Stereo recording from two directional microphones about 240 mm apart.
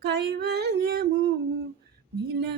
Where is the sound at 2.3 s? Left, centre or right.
Right.